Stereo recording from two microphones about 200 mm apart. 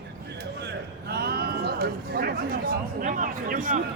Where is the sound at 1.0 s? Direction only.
55° right (ahead or behind).